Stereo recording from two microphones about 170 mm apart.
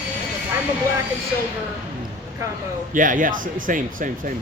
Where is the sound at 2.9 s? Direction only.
50° right (ahead or behind).